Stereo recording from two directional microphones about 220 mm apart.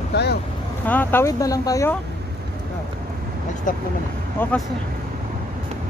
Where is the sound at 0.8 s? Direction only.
10° left (ahead or behind).